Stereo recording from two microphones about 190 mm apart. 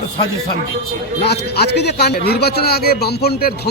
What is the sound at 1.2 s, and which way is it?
A man's voice, 60° left (ahead or behind).